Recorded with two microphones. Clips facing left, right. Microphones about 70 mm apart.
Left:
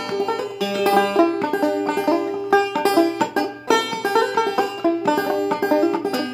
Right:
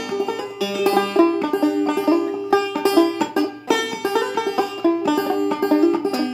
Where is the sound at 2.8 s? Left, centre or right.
Left.